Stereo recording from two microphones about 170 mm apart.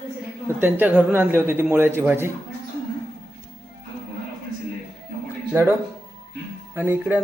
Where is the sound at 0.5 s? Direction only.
10° right (ahead or behind).